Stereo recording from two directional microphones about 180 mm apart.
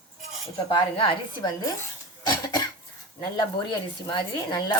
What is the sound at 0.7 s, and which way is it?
A woman's voice, 25° left (ahead or behind).